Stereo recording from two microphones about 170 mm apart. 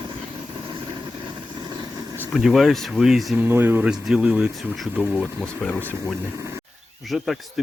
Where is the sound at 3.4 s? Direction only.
10° right (ahead or behind).